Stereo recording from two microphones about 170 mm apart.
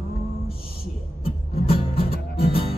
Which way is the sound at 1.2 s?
35° left (ahead or behind).